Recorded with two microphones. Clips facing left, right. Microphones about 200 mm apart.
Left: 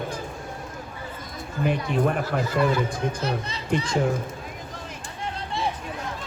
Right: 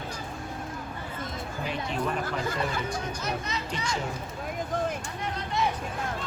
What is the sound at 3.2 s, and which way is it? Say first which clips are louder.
Speech: left 4 dB; 30° left (ahead or behind).